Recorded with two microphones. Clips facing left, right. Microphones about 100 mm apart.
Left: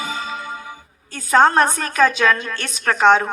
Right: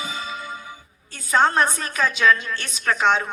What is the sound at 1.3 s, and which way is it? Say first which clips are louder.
A woman's voice: left 5 dB; 45° left (ahead or behind).